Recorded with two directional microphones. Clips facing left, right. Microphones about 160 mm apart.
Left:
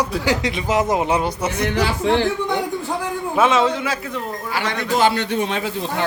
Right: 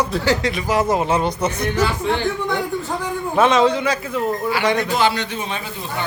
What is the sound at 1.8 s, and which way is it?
Speech, 90° left.